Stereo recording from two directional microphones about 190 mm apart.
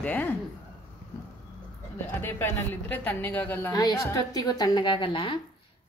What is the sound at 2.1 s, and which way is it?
A woman's voice, 10° left (ahead or behind).